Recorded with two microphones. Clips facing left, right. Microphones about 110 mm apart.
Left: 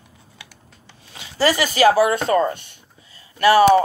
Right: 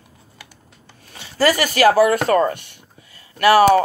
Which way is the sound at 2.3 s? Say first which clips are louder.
Right 2 dB; 45° right (ahead or behind).